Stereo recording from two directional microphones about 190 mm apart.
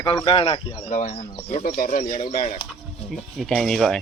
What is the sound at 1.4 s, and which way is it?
Speech, 40° left (ahead or behind).